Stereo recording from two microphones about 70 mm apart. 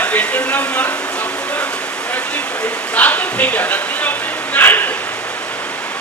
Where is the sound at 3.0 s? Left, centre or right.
Left.